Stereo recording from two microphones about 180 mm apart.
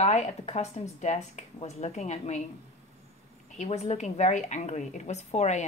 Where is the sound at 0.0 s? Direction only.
40° left (ahead or behind).